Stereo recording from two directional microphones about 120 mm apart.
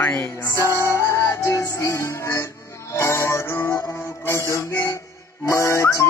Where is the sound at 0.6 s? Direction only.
25° right (ahead or behind).